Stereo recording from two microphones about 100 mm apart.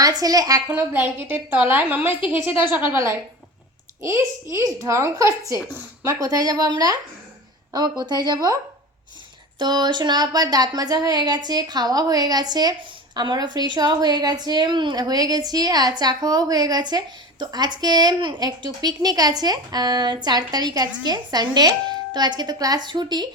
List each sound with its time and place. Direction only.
0.0 s a woman's voice: 40° right (ahead or behind)
0.7 s a woman's voice: 20° right (ahead or behind)
4.5 s a woman's voice: 35° right (ahead or behind)
9.6 s a woman's voice: 45° right (ahead or behind)